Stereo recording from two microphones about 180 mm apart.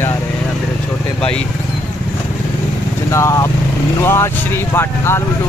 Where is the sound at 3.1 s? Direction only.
15° left (ahead or behind).